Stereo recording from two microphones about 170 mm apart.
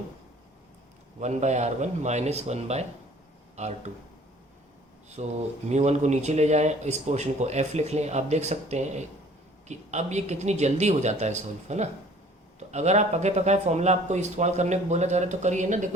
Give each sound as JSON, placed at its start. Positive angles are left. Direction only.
{"t": 1.2, "sound": "speech", "side_deg": -45}
{"t": 5.1, "sound": "speech", "side_deg": -40}